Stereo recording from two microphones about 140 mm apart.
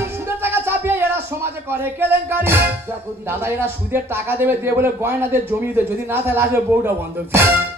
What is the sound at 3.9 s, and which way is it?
Music, 15° right (ahead or behind).